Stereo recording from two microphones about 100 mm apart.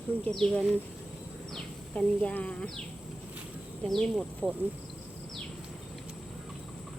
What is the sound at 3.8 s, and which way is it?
Speech, 5° left (ahead or behind).